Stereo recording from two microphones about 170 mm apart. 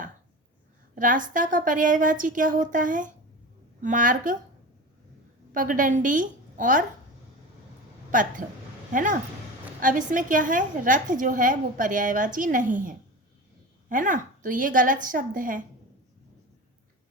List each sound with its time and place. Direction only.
0.9 s a woman's voice: 50° right (ahead or behind)
5.5 s a woman's voice: 50° right (ahead or behind)
8.1 s a woman's voice: 50° right (ahead or behind)